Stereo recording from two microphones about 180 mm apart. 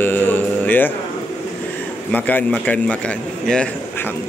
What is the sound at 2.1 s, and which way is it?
Speech, 10° left (ahead or behind).